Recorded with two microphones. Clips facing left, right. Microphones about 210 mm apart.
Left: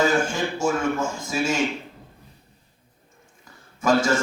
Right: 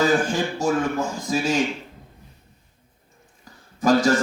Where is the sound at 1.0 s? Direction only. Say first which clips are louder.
Right 1 dB; 35° right (ahead or behind).